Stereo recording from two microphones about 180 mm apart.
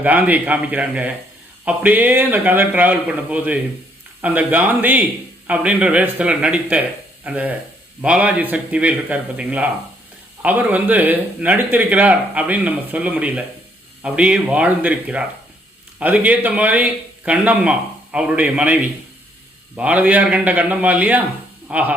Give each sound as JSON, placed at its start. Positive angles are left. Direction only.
{"t": 0.0, "sound": "speech", "side_deg": -10}